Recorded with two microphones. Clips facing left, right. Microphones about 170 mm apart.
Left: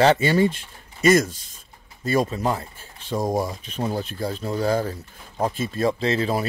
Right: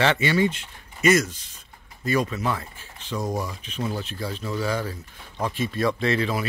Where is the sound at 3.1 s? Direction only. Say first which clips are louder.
Left 5 dB; 45° left (ahead or behind).